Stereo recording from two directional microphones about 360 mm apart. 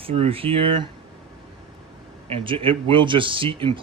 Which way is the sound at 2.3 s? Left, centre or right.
Centre.